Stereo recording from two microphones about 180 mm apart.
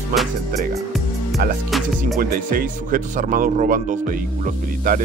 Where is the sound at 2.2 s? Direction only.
50° right (ahead or behind).